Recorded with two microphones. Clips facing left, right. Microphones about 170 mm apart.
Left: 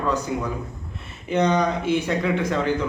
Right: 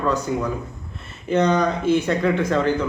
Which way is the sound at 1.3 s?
15° left (ahead or behind).